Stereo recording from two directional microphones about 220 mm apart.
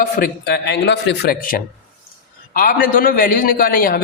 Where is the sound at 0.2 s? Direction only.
50° left (ahead or behind).